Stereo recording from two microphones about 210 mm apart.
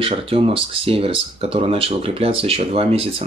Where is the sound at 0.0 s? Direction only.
25° right (ahead or behind).